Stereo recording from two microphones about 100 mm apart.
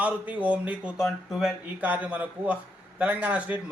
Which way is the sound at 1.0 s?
Centre (ahead or behind).